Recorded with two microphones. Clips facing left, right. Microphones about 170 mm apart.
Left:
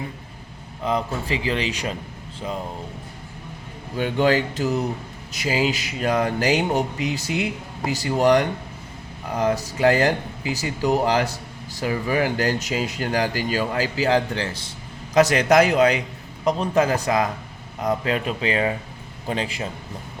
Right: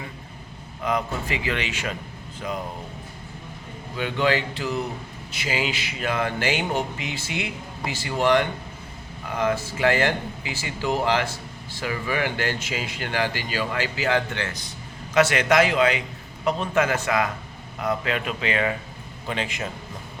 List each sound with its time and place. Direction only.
0.9 s speech: 30° left (ahead or behind)
3.9 s speech: 40° left (ahead or behind)